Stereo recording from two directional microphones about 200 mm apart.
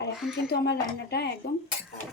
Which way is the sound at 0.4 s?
55° left (ahead or behind).